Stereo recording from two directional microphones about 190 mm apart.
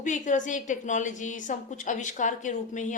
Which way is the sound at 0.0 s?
40° left (ahead or behind).